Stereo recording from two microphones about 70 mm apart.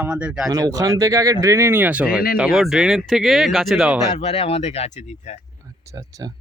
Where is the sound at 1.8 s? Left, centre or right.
Right.